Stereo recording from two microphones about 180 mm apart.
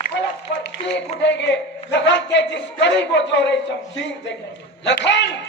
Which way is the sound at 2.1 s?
80° left.